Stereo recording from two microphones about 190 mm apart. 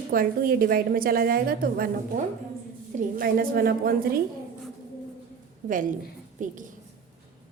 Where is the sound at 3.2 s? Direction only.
50° right (ahead or behind).